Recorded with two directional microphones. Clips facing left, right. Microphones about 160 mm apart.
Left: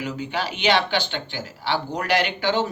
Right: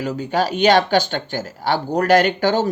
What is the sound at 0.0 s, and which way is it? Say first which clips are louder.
Speech: right 7 dB; 45° right (ahead or behind).